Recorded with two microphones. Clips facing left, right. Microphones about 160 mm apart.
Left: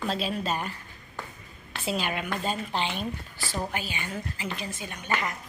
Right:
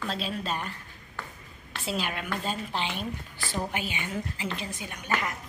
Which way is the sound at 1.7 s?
Centre (ahead or behind).